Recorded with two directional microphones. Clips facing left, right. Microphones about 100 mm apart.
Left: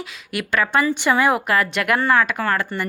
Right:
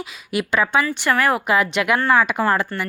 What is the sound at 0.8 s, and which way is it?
Speech, 15° left (ahead or behind).